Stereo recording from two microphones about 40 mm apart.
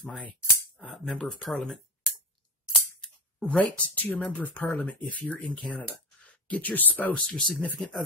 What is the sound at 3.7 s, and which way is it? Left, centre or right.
Speech, left.